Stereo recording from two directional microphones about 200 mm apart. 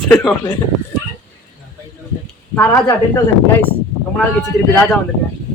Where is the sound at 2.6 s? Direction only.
10° left (ahead or behind).